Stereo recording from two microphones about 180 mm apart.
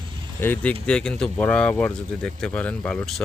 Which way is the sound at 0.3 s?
10° left (ahead or behind).